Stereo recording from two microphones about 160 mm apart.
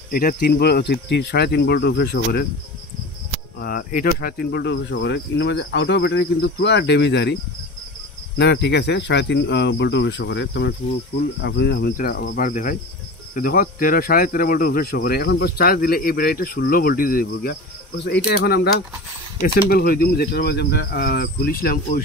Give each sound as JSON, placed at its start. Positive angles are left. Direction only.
{"t": 0.1, "sound": "speech", "side_deg": 60}
{"t": 3.6, "sound": "speech", "side_deg": 65}
{"t": 8.4, "sound": "speech", "side_deg": 90}
{"t": 19.4, "sound": "speech", "side_deg": 70}